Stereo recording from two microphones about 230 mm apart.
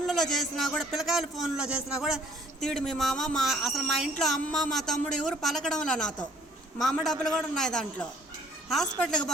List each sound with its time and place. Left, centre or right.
0.1 s speech: centre